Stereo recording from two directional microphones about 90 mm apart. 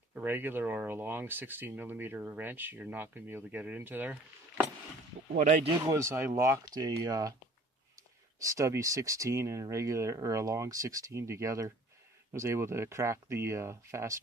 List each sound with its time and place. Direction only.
0.1 s speech: 20° right (ahead or behind)
5.9 s speech: 30° right (ahead or behind)
6.6 s speech: 45° right (ahead or behind)
8.4 s speech: 35° right (ahead or behind)